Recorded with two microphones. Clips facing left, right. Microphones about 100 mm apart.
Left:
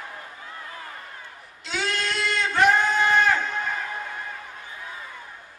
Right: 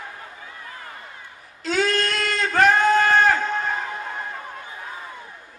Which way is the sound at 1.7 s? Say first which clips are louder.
Right 6 dB; 45° right (ahead or behind).